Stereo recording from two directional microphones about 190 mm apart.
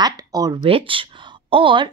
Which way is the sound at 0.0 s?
20° right (ahead or behind).